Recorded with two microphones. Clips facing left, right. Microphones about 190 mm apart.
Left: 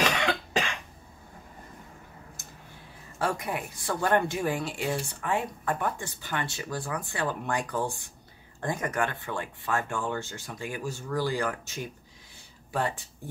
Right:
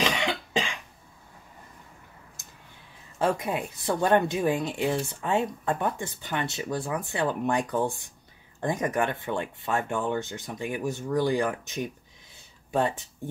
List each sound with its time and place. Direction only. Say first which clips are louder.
0.0 s cough: even; 20° right (ahead or behind)
3.2 s speech: right 4 dB; 20° right (ahead or behind)